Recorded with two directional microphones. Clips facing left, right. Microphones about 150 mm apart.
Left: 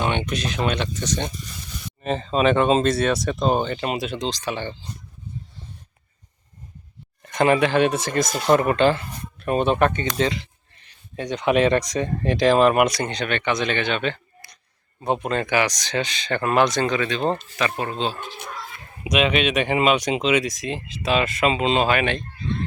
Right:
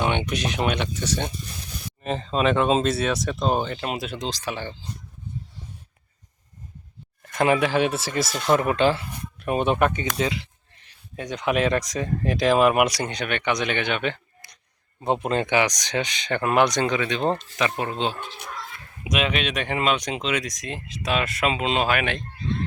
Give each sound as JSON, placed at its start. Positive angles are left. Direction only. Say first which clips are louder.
{"t": 0.0, "sound": "speech", "louder": "even", "side_deg": -15}
{"t": 7.3, "sound": "speech", "louder": "left 2 dB", "side_deg": -5}
{"t": 15.2, "sound": "speech", "louder": "right 1 dB", "side_deg": -25}
{"t": 18.2, "sound": "speech", "louder": "left 1 dB", "side_deg": 0}